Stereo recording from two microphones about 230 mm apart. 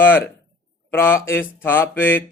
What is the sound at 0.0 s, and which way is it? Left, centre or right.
Speech, centre.